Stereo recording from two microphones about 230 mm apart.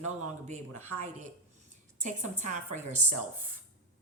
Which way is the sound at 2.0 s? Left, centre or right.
Right.